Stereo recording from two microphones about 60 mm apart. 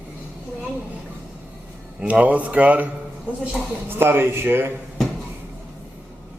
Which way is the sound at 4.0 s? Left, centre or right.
Right.